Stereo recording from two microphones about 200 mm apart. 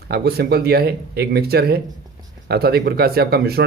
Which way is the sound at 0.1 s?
50° right (ahead or behind).